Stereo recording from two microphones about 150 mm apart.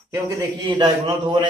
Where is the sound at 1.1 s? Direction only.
30° right (ahead or behind).